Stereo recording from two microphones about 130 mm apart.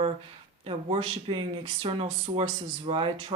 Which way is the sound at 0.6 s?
45° right (ahead or behind).